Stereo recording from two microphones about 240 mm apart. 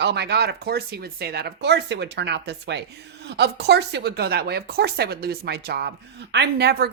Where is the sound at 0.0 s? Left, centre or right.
Right.